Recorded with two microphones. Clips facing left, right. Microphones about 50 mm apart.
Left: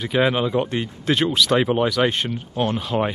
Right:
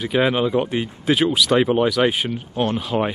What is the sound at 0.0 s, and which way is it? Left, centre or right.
Speech, centre.